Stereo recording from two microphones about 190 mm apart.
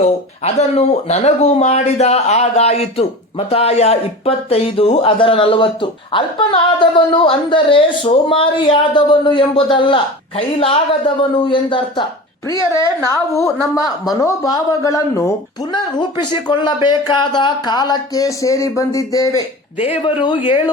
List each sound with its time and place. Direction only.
0.0 s speech: 35° left (ahead or behind)
13.3 s speech: 15° left (ahead or behind)
19.8 s speech: 30° left (ahead or behind)